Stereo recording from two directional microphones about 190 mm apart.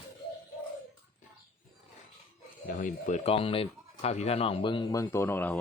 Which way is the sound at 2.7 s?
45° left (ahead or behind).